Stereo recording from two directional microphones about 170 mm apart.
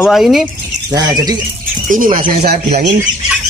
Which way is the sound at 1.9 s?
55° right (ahead or behind).